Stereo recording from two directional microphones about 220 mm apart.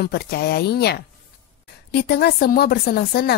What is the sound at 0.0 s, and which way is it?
Speech, 45° left (ahead or behind).